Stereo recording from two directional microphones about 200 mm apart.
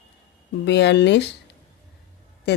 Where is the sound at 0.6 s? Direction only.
60° left (ahead or behind).